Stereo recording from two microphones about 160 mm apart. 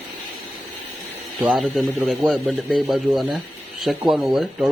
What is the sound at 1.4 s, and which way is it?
Speech, 5° right (ahead or behind).